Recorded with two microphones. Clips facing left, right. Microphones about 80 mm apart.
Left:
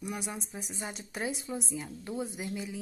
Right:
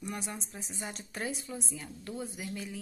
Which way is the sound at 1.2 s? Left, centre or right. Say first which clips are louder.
Left 3 dB; centre.